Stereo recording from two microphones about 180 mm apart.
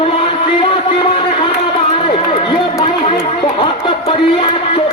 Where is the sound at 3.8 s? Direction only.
30° left (ahead or behind).